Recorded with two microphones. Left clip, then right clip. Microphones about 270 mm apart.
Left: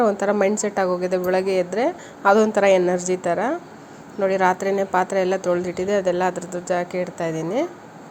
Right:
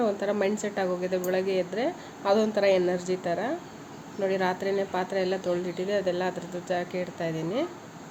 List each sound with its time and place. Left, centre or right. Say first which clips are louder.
0.0 s speech: left 8 dB; centre